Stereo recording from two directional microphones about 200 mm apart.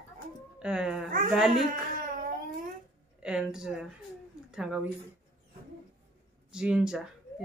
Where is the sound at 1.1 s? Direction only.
40° right (ahead or behind).